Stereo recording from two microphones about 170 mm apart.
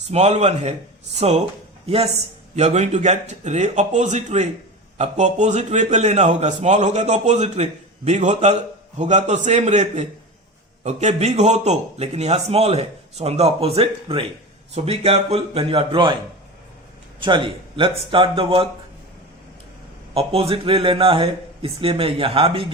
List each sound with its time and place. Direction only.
0.1 s a man's voice: 40° right (ahead or behind)
17.2 s a man's voice: 30° right (ahead or behind)
20.1 s a man's voice: 35° right (ahead or behind)